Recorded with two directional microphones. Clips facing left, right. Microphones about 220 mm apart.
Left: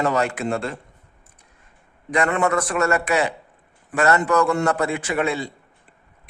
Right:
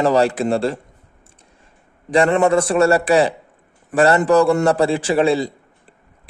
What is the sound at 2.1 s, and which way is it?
A man's voice, 30° right (ahead or behind).